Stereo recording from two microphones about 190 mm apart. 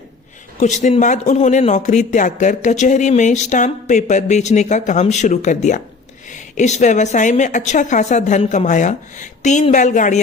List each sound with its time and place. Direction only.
0.6 s a woman's voice: 40° left (ahead or behind)